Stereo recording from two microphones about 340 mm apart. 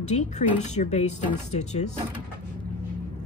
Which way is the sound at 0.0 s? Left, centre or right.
Centre.